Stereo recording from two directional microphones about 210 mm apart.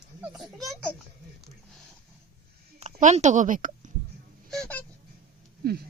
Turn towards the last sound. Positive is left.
turn(degrees=-50)  # may be behind; listen again after turning